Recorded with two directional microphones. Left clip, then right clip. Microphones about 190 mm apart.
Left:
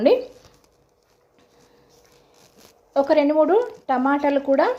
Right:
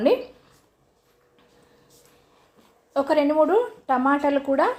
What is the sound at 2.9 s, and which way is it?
Speech, 10° left (ahead or behind).